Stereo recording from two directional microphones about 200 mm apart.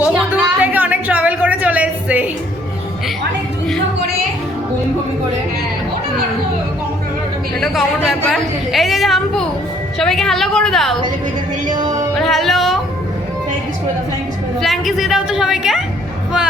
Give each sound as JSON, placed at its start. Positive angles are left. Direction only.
{"t": 0.0, "sound": "a sound", "side_deg": -5}
{"t": 7.6, "sound": "a woman's voice", "side_deg": 0}
{"t": 11.7, "sound": "music", "side_deg": -20}
{"t": 12.2, "sound": "music", "side_deg": 0}
{"t": 14.6, "sound": "a woman's voice", "side_deg": 0}